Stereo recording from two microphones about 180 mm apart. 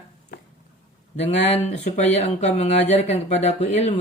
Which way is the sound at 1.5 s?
40° left (ahead or behind).